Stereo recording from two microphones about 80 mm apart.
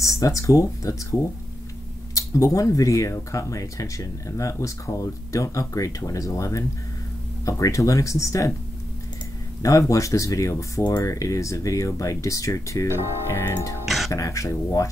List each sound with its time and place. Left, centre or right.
0.0 s speech: left
2.1 s speech: left
9.6 s speech: left
10.8 s speech: left
13.8 s music: centre
14.1 s speech: left